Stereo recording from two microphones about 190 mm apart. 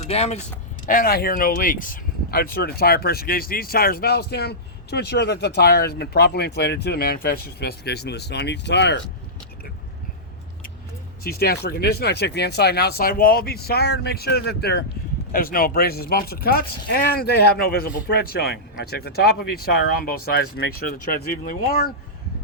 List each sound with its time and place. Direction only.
0.1 s speech: 35° left (ahead or behind)
0.9 s speech: 50° left (ahead or behind)
11.2 s speech: 55° left (ahead or behind)